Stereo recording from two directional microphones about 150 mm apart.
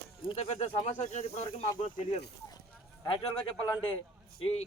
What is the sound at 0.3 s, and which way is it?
Speech, 45° left (ahead or behind).